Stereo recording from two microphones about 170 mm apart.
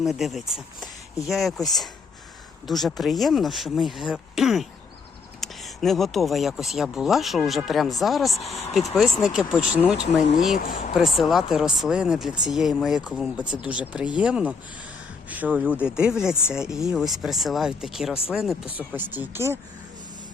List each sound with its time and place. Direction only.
0.0 s speech: centre (ahead or behind)
10.6 s speech: 50° left (ahead or behind)
11.2 s speech: centre (ahead or behind)